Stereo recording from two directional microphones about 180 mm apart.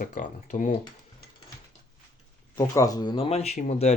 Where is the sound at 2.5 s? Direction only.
20° left (ahead or behind); by 3.9 s 35° left (ahead or behind).